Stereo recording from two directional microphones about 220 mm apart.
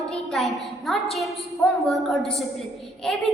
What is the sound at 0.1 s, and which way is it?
A woman's voice, centre (ahead or behind).